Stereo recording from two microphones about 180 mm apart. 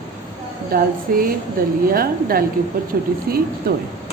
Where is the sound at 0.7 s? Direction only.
55° right (ahead or behind).